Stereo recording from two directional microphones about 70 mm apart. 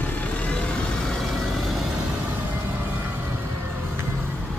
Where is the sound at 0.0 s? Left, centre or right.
Left; by 2.0 s centre.